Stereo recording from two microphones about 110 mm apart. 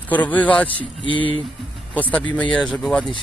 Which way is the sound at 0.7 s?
50° left (ahead or behind).